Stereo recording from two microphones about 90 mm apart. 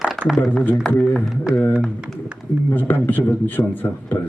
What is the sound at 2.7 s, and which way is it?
A man's voice, 20° left (ahead or behind).